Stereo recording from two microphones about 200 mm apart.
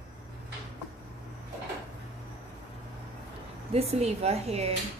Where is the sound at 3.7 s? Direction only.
30° right (ahead or behind).